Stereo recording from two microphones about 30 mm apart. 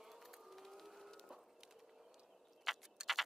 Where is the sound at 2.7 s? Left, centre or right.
Centre.